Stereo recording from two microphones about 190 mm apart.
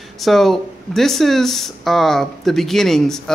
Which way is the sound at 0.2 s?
Centre (ahead or behind).